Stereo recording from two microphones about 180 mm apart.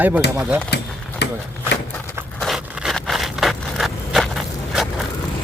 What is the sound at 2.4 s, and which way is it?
Vehicle, centre (ahead or behind).